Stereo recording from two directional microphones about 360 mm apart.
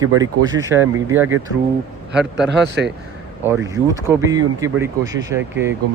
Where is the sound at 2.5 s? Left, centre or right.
Right.